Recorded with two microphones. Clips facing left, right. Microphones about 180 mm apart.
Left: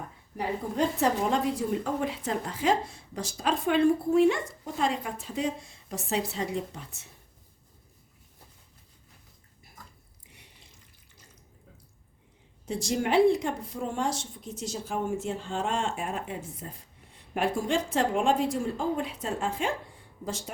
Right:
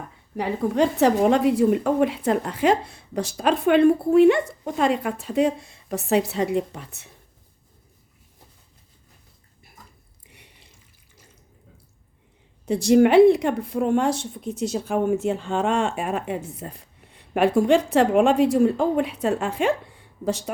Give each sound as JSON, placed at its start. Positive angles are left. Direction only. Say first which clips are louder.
{"t": 0.3, "sound": "a woman's voice", "louder": "right 7 dB", "side_deg": -80}
{"t": 12.6, "sound": "a woman's voice", "louder": "right 13 dB", "side_deg": -65}